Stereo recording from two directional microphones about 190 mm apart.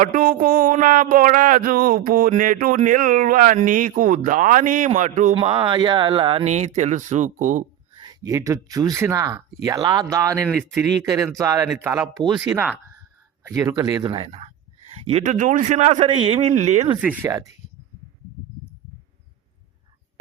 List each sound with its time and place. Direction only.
0.0 s a sound: 45° right (ahead or behind)
5.3 s speech: 25° right (ahead or behind)
7.9 s speech: 20° right (ahead or behind)
10.5 s speech: centre (ahead or behind)
10.8 s speech: 20° right (ahead or behind); by 16.9 s 35° right (ahead or behind)
17.2 s speech: 15° right (ahead or behind)